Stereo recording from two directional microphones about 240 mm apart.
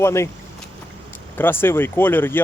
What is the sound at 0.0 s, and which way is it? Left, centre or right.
Speech, centre.